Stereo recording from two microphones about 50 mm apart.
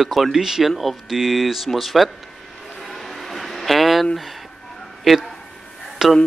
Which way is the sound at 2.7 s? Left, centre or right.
Centre.